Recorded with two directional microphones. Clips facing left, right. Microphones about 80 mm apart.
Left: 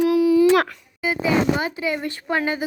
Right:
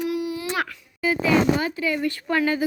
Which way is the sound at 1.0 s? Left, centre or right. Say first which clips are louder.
Even; centre.